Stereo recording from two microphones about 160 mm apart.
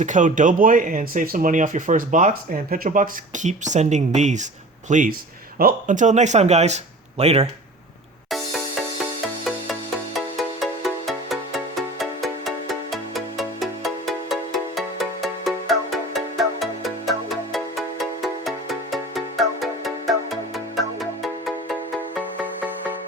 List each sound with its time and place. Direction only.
0.0 s speech: 50° right (ahead or behind)
10.2 s music: centre (ahead or behind)